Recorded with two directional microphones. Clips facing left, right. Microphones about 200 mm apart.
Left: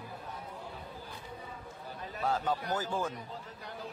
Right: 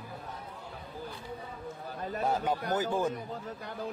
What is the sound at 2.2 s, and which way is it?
Speech, 15° right (ahead or behind).